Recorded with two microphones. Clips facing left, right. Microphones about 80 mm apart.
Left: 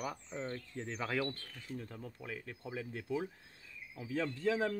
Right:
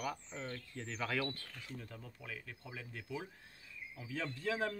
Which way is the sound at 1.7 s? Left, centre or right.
Left.